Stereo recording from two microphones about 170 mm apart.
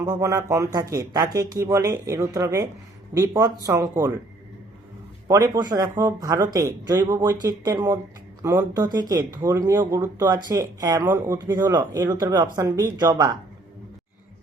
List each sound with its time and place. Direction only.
0.0 s speech: 20° right (ahead or behind)
5.3 s speech: 25° right (ahead or behind)